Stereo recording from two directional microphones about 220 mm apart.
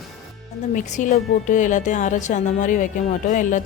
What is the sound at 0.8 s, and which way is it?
A woman's voice, 35° left (ahead or behind).